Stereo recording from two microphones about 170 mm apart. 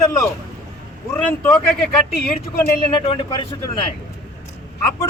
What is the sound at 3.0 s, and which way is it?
Speech, 30° left (ahead or behind).